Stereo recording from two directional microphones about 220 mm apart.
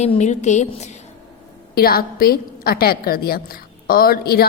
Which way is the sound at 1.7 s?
45° left (ahead or behind).